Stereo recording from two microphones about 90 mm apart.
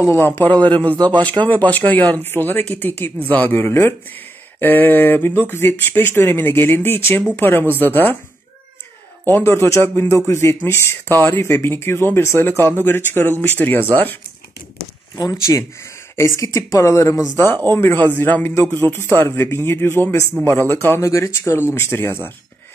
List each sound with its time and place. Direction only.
0.0 s speech: 30° left (ahead or behind)
0.5 s a man's voice: 15° left (ahead or behind)
9.2 s speech: 25° left (ahead or behind)
15.1 s speech: 40° left (ahead or behind)